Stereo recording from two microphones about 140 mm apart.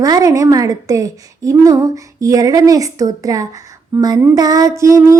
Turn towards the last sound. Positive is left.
turn(degrees=-20)  # may be behind; listen again after turning